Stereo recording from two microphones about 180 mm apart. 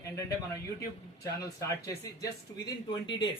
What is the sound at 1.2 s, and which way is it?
Speech, 15° left (ahead or behind).